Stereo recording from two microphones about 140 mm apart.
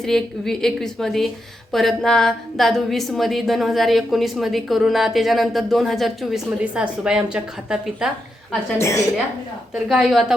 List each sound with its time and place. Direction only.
0.0 s a woman's voice: 5° left (ahead or behind)
8.8 s a woman's voice: 20° left (ahead or behind)
9.7 s a woman's voice: centre (ahead or behind)